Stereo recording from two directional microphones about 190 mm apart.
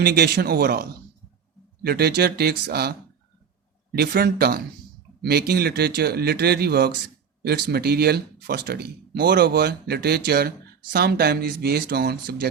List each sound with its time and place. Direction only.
0.0 s speech: 55° right (ahead or behind)
3.9 s speech: 55° right (ahead or behind)